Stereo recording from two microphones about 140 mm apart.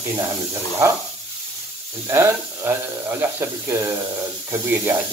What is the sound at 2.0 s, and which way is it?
Speech, 20° right (ahead or behind).